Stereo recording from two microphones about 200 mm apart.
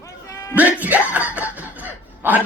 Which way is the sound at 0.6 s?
10° right (ahead or behind).